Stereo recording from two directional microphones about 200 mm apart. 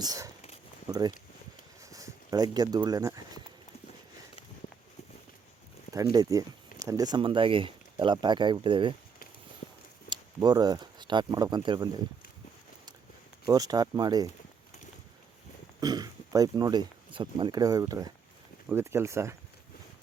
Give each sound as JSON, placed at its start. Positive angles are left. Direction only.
{"t": 0.0, "sound": "speech", "side_deg": -20}
{"t": 5.9, "sound": "speech", "side_deg": -20}
{"t": 10.1, "sound": "speech", "side_deg": -20}
{"t": 13.4, "sound": "speech", "side_deg": -20}
{"t": 15.8, "sound": "speech", "side_deg": -20}